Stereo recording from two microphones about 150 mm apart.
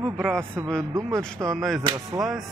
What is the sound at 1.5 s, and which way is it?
Speech, centre (ahead or behind).